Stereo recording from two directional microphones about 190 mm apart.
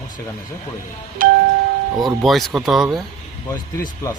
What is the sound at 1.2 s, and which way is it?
Music, 45° right (ahead or behind).